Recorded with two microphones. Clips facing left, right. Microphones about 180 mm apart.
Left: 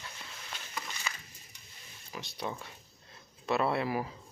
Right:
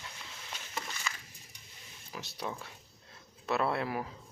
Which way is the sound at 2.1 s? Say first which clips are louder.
Left 1 dB; 5° right (ahead or behind).